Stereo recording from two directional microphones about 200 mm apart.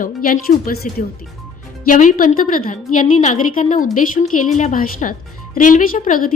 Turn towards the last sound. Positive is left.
turn(degrees=45)  # may be behind; listen again after turning